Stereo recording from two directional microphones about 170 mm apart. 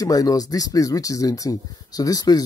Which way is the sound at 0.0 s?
20° left (ahead or behind).